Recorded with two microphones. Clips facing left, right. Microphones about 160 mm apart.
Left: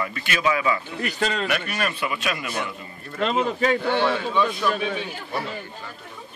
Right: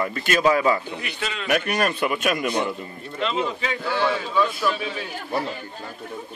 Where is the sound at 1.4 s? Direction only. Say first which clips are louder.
Right 4 dB; 45° right (ahead or behind).